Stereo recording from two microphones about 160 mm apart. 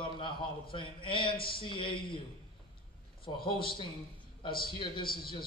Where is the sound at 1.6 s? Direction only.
30° left (ahead or behind).